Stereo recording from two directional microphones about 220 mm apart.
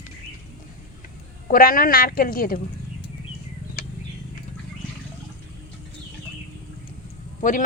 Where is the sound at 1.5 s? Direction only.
40° left (ahead or behind).